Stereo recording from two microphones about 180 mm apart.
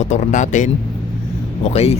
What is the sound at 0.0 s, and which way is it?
Speech, 40° left (ahead or behind).